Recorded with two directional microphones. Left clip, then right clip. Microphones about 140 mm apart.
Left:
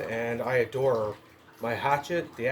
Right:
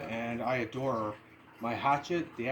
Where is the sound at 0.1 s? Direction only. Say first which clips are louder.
Left 5 dB; 45° left (ahead or behind).